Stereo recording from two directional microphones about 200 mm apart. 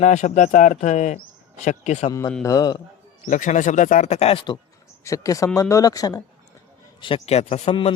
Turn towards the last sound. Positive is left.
turn(degrees=30)  # may be behind; listen again after turning